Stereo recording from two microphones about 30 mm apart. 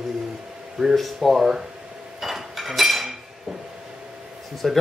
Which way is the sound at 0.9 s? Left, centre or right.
Centre.